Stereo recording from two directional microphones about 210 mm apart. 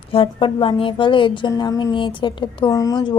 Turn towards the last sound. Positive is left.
turn(degrees=20)  # may be behind; listen again after turning